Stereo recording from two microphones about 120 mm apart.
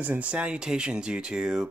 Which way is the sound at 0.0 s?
15° right (ahead or behind).